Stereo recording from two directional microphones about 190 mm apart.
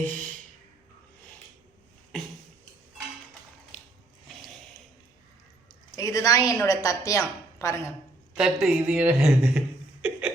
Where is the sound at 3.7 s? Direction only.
35° left (ahead or behind).